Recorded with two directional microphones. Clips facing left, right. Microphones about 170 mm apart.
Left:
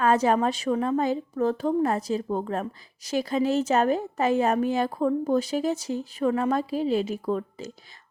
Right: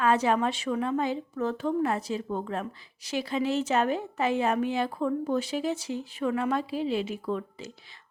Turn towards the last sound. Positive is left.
turn(degrees=40)  # may be behind; listen again after turning